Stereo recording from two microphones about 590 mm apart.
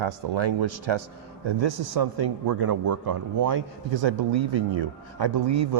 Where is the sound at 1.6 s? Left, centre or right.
Right.